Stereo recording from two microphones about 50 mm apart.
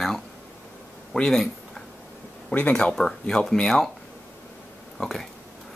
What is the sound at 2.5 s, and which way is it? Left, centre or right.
Speech, left.